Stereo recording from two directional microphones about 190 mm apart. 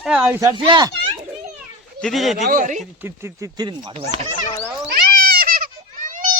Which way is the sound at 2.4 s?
45° right (ahead or behind).